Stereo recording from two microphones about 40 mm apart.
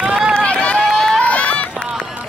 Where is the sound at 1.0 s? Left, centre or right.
Centre.